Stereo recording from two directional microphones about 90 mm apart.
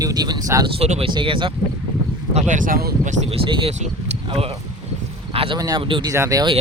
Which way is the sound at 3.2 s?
90° right.